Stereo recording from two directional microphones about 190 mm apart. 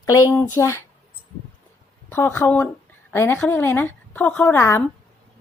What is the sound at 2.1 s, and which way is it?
A woman's voice, 10° left (ahead or behind).